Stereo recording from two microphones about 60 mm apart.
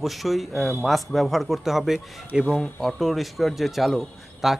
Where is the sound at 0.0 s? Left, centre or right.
Centre.